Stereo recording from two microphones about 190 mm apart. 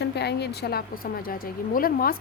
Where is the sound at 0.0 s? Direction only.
60° left (ahead or behind).